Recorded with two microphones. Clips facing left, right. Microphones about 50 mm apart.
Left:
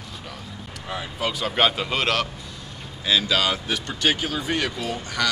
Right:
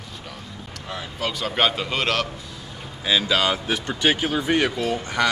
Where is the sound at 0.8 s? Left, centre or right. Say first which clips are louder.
Left 1 dB; centre.